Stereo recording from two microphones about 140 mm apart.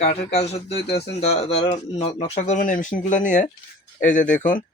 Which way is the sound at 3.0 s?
65° left (ahead or behind).